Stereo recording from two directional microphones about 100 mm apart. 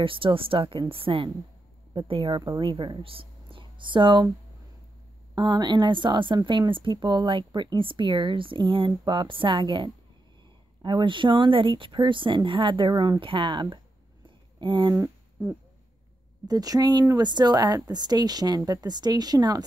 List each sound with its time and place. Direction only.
0.0 s a woman's voice: 60° right (ahead or behind)
5.3 s a woman's voice: 50° right (ahead or behind)
14.2 s a sound: 55° right (ahead or behind)
16.4 s a woman's voice: 40° right (ahead or behind)